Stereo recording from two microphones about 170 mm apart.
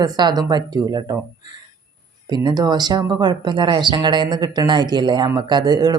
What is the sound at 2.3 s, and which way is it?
Speech, 25° right (ahead or behind).